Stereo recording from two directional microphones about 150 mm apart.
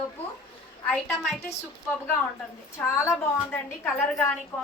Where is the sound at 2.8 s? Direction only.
20° left (ahead or behind).